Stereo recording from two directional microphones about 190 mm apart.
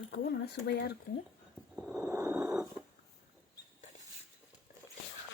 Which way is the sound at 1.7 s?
Centre (ahead or behind).